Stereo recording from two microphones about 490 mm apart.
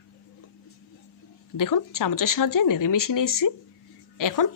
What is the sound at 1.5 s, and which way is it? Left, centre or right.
Speech, left.